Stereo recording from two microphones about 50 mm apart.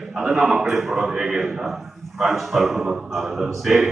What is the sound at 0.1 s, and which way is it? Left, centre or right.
A man's voice, centre.